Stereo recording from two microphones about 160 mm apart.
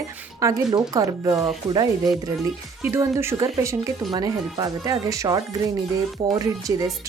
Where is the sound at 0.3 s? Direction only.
20° right (ahead or behind).